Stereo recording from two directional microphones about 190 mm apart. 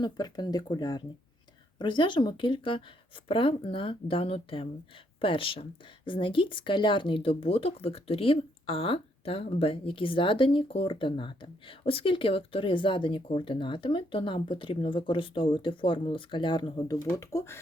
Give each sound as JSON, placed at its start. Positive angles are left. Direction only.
{"t": 0.0, "sound": "speech", "side_deg": 20}